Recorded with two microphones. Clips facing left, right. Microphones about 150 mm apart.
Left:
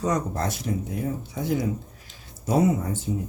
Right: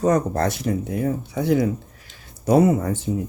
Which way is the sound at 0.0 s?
60° right (ahead or behind).